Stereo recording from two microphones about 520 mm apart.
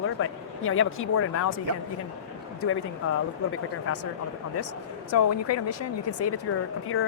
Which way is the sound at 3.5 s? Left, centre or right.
Left.